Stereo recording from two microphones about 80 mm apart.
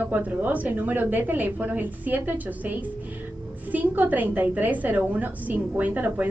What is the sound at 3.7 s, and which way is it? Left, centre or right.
A woman's voice, right.